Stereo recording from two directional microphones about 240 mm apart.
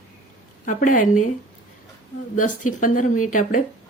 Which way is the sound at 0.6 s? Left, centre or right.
Left.